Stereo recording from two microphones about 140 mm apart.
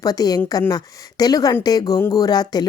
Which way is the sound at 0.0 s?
25° left (ahead or behind).